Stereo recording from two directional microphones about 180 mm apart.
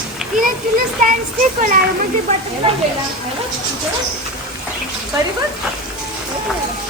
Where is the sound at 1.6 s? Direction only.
45° right (ahead or behind).